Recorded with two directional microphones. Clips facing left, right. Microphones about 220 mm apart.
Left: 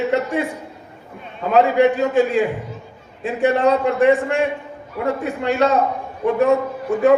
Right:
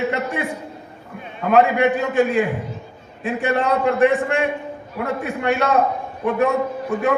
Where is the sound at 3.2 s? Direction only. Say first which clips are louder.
Left 4 dB; 55° right (ahead or behind).